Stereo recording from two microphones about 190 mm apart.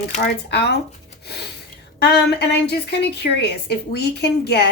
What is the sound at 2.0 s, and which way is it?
A woman's voice, 60° left (ahead or behind).